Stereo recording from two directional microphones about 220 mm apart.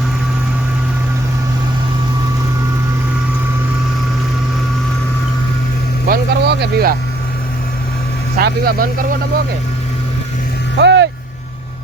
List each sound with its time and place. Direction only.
6.1 s a sound: 50° right (ahead or behind)
8.4 s speech: 45° right (ahead or behind)
10.8 s vehicle: 50° right (ahead or behind)